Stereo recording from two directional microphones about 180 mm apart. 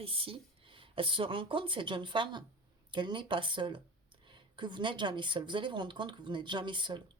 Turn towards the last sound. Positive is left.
turn(degrees=-25)  # may be behind; listen again after turning